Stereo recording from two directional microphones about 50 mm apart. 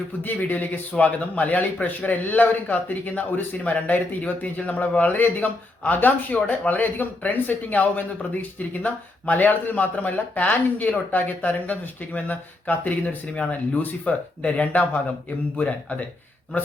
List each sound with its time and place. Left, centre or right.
0.2 s a man's voice: left